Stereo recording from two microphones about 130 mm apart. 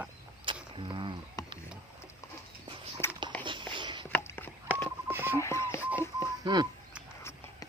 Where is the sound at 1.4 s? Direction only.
30° left (ahead or behind).